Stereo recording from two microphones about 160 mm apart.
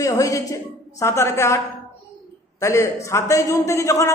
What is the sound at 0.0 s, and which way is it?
A man's voice, 20° left (ahead or behind).